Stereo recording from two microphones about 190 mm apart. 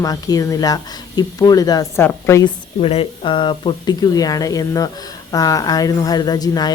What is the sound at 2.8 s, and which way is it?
Speech, 30° left (ahead or behind).